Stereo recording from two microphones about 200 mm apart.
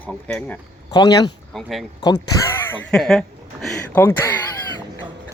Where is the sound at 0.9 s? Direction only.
20° left (ahead or behind).